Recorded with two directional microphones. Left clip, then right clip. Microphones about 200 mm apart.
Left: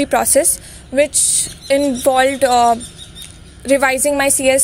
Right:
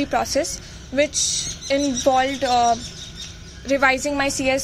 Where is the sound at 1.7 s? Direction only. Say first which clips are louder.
Left 5 dB; 45° left (ahead or behind).